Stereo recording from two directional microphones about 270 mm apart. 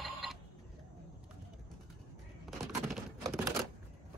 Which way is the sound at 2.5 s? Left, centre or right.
Centre.